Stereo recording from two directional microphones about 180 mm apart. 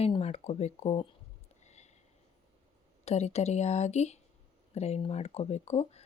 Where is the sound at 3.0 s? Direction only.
35° left (ahead or behind).